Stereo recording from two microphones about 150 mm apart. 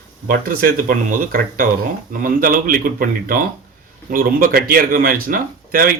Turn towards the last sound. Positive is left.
turn(degrees=-70)  # may be behind; listen again after turning